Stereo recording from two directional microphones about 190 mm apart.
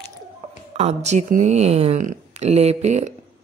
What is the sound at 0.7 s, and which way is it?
Speech, 35° right (ahead or behind).